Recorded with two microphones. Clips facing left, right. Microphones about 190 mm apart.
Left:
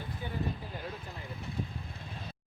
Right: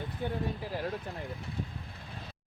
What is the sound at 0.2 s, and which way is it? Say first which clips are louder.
Speech: right 7 dB; 60° right (ahead or behind).